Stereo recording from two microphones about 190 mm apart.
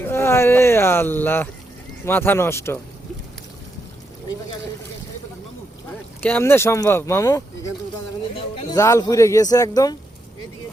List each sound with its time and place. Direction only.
0.0 s speech: 15° left (ahead or behind)
6.2 s speech: 10° left (ahead or behind)
8.7 s speech: 15° left (ahead or behind)